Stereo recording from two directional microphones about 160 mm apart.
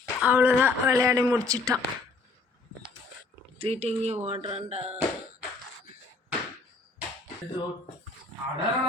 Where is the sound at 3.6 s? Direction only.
40° right (ahead or behind).